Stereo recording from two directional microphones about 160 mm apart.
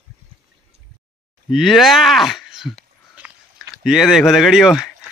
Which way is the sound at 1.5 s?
Centre (ahead or behind).